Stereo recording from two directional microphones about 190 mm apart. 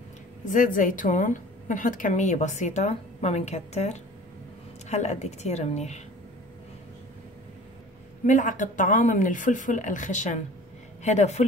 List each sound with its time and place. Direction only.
0.5 s a woman's voice: 45° left (ahead or behind)
8.3 s a woman's voice: 40° left (ahead or behind)